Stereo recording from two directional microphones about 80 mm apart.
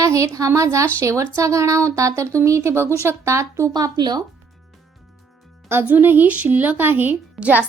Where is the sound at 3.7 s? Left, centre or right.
Right.